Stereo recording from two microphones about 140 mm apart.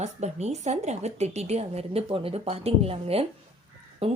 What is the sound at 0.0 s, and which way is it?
Speech, 55° right (ahead or behind).